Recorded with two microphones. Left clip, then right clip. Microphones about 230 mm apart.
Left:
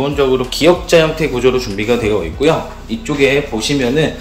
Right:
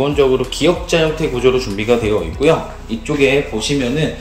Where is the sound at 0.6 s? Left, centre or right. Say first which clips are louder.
Left 6 dB; centre.